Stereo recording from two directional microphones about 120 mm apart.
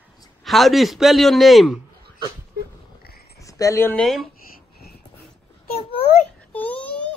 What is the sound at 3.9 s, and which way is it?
Speech, 5° left (ahead or behind).